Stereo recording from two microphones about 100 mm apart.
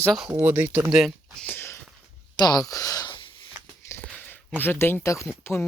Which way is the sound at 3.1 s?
55° left (ahead or behind).